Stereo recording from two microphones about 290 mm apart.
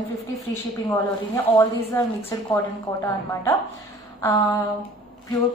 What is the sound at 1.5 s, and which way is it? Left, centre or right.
A woman's voice, centre.